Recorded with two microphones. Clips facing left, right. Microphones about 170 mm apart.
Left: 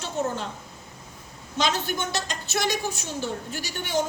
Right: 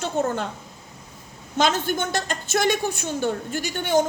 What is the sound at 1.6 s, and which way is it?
A woman's voice, 50° right (ahead or behind).